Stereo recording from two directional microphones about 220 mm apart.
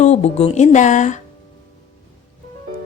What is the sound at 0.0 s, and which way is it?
Speech, 30° left (ahead or behind).